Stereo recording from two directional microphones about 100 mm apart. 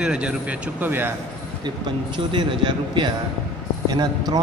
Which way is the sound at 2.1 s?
55° right (ahead or behind).